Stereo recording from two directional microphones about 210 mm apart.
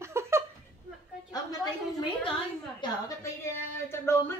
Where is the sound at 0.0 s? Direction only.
10° right (ahead or behind).